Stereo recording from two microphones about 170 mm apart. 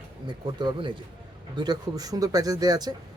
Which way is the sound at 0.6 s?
30° right (ahead or behind).